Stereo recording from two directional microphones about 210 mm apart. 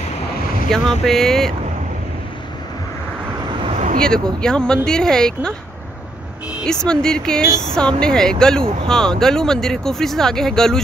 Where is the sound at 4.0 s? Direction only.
5° left (ahead or behind).